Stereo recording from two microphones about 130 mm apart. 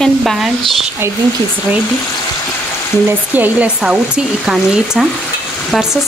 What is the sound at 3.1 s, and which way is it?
Speech, 15° right (ahead or behind).